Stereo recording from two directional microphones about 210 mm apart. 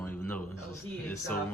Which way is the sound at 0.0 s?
10° left (ahead or behind).